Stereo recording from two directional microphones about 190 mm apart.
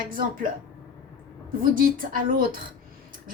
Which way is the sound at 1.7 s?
50° right (ahead or behind).